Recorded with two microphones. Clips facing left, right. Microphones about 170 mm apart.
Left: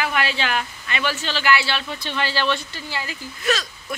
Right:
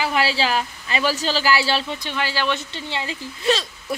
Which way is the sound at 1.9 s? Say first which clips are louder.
Even; 15° right (ahead or behind).